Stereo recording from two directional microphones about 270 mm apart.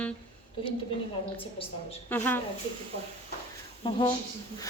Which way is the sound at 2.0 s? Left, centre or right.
Centre.